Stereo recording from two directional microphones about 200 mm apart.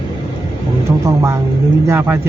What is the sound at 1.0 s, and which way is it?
A man's voice, 15° right (ahead or behind).